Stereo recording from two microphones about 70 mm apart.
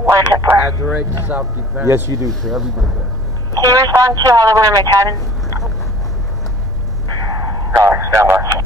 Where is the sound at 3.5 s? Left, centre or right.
Right.